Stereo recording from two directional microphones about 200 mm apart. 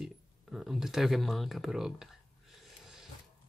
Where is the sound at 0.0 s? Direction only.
Centre (ahead or behind).